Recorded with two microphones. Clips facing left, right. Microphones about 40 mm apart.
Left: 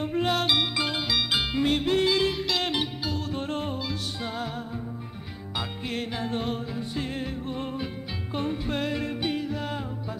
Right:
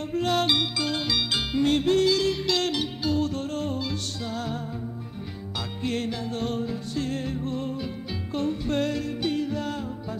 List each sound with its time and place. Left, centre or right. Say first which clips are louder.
0.0 s music: even; centre
0.4 s music: right 2 dB; centre
0.7 s music: even; centre
2.0 s music: right 1 dB; left
2.4 s music: right 2 dB; centre
3.3 s music: right 1 dB; left
3.7 s music: right 2 dB; centre
4.2 s music: even; left
5.6 s music: right 3 dB; centre
6.1 s music: left 1 dB; left
6.5 s music: right 2 dB; centre
9.0 s music: right 1 dB; left
9.3 s music: right 2 dB; centre